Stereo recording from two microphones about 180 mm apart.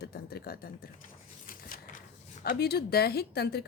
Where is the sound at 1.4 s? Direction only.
50° left (ahead or behind).